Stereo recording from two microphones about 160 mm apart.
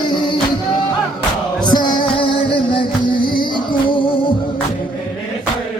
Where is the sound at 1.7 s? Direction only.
25° left (ahead or behind).